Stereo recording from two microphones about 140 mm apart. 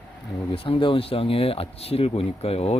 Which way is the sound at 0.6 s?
40° left (ahead or behind).